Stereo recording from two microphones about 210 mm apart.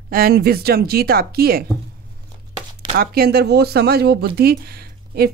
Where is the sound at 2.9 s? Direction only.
45° right (ahead or behind).